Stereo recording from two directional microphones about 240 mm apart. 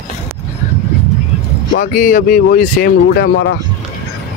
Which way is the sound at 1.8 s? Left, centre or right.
Left.